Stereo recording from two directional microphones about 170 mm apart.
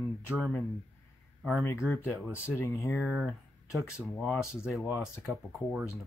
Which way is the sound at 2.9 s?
Centre (ahead or behind).